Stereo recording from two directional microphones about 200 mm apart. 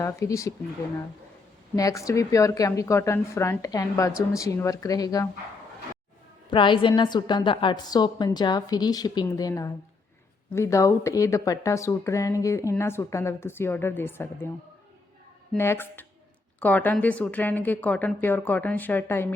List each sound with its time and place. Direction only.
0.0 s speech: 15° left (ahead or behind)
1.7 s speech: 15° left (ahead or behind)
6.5 s a woman's voice: 25° left (ahead or behind)
15.5 s speech: 10° left (ahead or behind)